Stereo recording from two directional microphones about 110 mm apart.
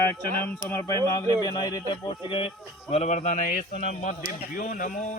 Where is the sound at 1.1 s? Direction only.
35° left (ahead or behind).